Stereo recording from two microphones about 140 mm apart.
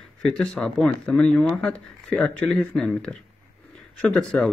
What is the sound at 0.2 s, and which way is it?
Speech, 5° left (ahead or behind).